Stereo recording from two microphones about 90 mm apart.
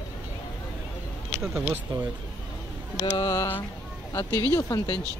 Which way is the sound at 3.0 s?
45° left (ahead or behind).